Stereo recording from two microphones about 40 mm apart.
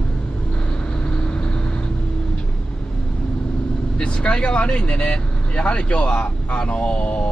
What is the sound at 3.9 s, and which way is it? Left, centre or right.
Speech, left.